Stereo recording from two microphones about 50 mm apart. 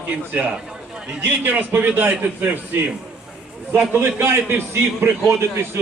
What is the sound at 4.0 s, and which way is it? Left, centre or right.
A man's voice, right.